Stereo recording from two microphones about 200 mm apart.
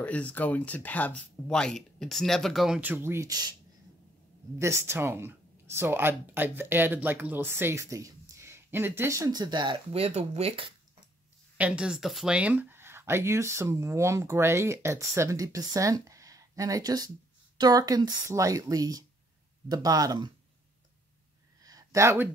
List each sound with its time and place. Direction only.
0.0 s speech: 5° left (ahead or behind); by 3.5 s 20° right (ahead or behind)
4.6 s speech: 15° right (ahead or behind); by 10.7 s 30° right (ahead or behind)
11.5 s speech: 5° right (ahead or behind)
21.6 s a sound: 15° right (ahead or behind)